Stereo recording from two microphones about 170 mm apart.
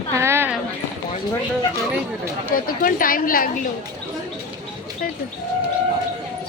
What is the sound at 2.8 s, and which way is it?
Speech, 55° left (ahead or behind).